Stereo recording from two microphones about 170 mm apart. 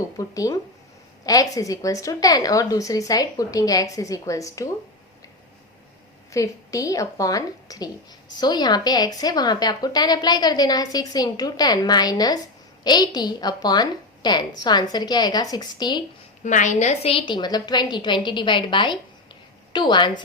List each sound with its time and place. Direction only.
0.2 s a woman's voice: 20° left (ahead or behind)
6.3 s a woman's voice: 20° left (ahead or behind)
16.4 s a woman's voice: 45° left (ahead or behind); by 20.2 s 25° left (ahead or behind)